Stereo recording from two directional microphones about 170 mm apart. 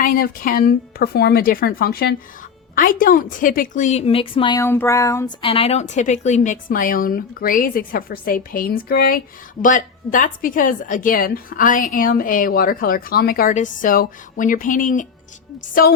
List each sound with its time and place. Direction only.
0.0 s a woman's voice: 55° left (ahead or behind); by 4.6 s 30° left (ahead or behind)
4.6 s a sound: 15° left (ahead or behind)
5.4 s a woman's voice: 35° left (ahead or behind); by 15.0 s 50° left (ahead or behind)